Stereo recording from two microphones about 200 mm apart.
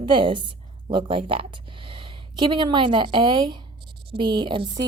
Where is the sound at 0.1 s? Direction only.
25° right (ahead or behind).